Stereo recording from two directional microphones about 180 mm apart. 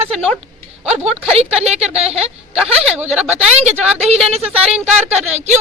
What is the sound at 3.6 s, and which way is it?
A woman's voice, 35° right (ahead or behind).